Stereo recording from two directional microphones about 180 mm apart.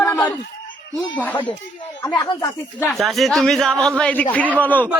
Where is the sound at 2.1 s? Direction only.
20° left (ahead or behind).